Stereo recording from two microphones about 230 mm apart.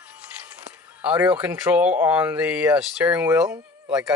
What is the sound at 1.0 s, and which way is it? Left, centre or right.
Speech, centre.